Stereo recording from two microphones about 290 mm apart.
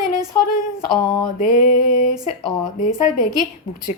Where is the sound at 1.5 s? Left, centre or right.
Left.